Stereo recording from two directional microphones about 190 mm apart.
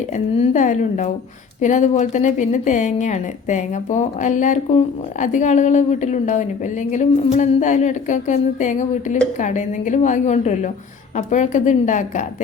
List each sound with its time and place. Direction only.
0.3 s speech: 35° left (ahead or behind)